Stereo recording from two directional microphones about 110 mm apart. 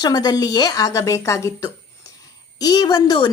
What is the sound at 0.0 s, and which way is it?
A woman's voice, 40° left (ahead or behind).